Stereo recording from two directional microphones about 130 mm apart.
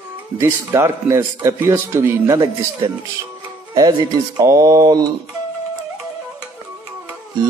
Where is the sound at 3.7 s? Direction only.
30° right (ahead or behind).